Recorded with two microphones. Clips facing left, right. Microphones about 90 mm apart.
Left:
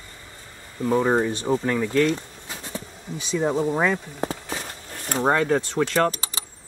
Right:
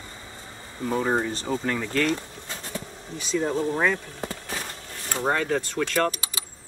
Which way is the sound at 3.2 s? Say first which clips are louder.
Left 2 dB; 20° left (ahead or behind).